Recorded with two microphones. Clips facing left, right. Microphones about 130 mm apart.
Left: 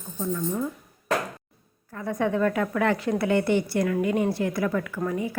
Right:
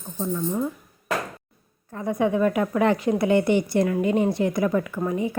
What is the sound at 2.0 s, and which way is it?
A woman's voice, 15° right (ahead or behind).